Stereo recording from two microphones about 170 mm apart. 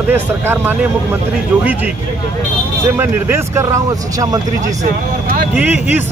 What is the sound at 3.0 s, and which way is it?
Speech, 15° right (ahead or behind).